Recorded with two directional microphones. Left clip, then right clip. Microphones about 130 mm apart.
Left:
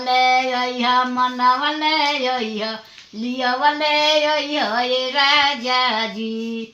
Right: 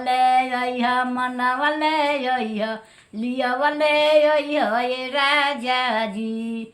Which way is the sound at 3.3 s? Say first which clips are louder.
Left 3 dB; 35° right (ahead or behind).